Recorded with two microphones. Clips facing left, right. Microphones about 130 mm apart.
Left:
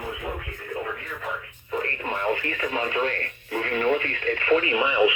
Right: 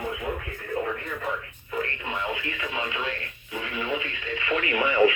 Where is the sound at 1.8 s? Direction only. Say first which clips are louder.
Left 4 dB; 50° left (ahead or behind).